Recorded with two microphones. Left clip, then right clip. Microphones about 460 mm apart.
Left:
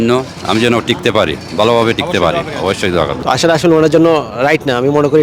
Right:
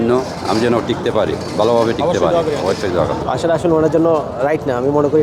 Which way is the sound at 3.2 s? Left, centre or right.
Left.